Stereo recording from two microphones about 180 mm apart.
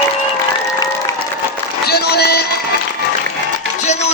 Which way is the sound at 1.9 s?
65° left (ahead or behind).